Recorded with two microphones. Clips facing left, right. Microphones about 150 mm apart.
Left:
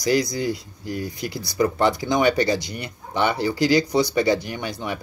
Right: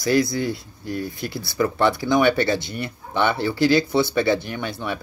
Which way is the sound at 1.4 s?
20° left (ahead or behind).